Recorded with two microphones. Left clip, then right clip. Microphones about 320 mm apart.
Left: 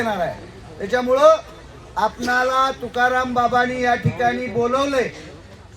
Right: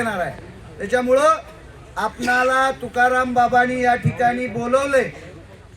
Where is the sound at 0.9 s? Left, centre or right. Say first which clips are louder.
Left 1 dB; centre.